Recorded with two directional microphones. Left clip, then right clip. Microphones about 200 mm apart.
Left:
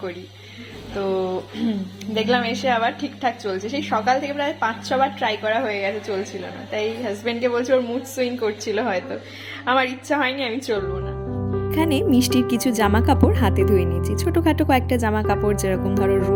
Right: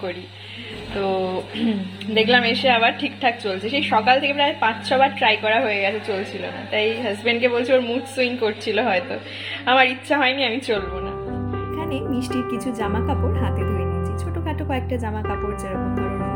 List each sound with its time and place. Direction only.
1.0 s a woman's voice: centre (ahead or behind)
11.7 s speech: 55° left (ahead or behind)